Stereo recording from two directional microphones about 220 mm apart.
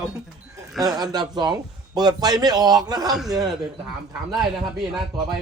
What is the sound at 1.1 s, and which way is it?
Speech, 20° right (ahead or behind).